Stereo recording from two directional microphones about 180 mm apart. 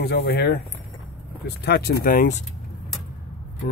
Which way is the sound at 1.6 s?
65° left (ahead or behind).